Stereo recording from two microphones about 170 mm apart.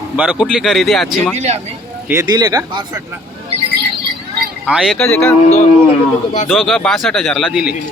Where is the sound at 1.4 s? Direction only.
40° right (ahead or behind).